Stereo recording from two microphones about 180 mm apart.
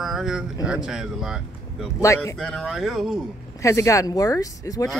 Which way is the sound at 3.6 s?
15° left (ahead or behind).